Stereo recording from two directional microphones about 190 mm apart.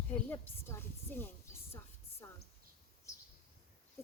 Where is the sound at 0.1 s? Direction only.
10° left (ahead or behind).